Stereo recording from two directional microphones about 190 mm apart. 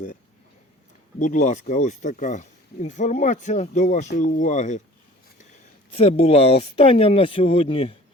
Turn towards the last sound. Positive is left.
turn(degrees=30)  # may be behind; listen again after turning